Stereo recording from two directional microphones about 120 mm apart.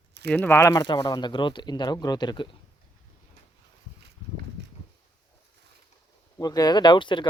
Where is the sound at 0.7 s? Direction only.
40° left (ahead or behind).